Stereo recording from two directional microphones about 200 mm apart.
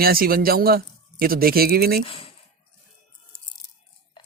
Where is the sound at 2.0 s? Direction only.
30° left (ahead or behind).